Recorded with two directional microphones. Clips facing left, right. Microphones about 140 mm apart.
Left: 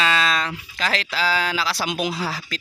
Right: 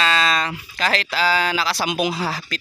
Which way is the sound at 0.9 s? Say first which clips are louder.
Right 3 dB; 60° right (ahead or behind).